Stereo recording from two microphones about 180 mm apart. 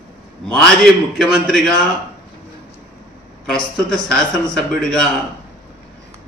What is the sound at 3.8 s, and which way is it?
A man's voice, centre (ahead or behind).